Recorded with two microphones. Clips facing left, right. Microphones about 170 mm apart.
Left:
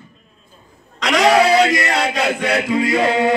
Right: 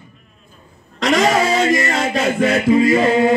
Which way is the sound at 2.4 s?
70° left (ahead or behind).